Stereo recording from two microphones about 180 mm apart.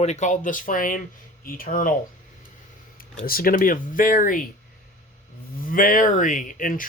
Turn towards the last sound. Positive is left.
turn(degrees=50)  # may be behind; listen again after turning